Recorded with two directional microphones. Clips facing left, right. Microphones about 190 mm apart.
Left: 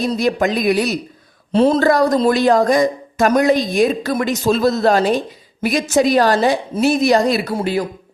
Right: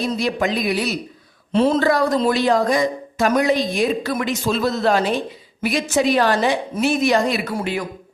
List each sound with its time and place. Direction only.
0.0 s speech: 45° left (ahead or behind)